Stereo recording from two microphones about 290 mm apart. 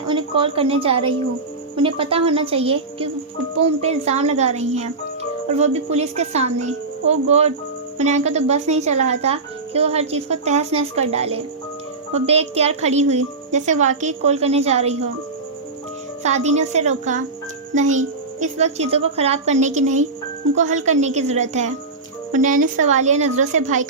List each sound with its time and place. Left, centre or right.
0.1 s a woman's voice: centre
16.2 s speech: right